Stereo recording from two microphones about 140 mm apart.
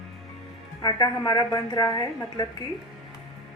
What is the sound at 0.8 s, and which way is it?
A woman's voice, 30° left (ahead or behind).